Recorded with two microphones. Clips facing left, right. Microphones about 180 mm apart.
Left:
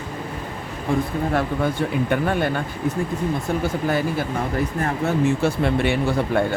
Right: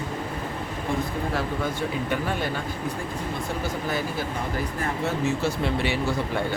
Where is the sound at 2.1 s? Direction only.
55° left (ahead or behind).